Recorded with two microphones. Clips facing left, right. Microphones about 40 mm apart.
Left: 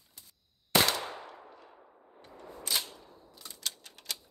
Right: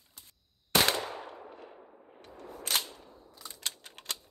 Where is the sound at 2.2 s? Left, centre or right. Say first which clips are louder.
Right 1 dB; right.